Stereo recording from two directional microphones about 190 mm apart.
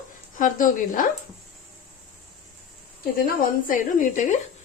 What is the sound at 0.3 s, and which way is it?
Speech, 45° left (ahead or behind).